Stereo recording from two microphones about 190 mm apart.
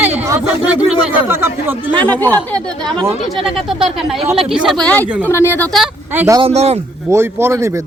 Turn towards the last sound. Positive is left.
turn(degrees=-15)  # may be behind; listen again after turning